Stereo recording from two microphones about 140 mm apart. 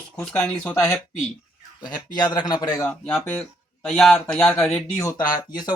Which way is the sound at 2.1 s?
30° left (ahead or behind).